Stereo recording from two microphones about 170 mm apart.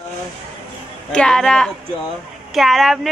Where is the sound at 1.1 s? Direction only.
5° left (ahead or behind).